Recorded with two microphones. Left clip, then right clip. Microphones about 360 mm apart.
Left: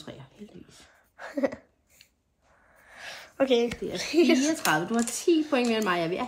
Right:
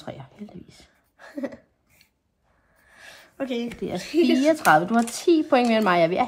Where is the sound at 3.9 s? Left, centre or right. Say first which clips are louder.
Right 1 dB; left.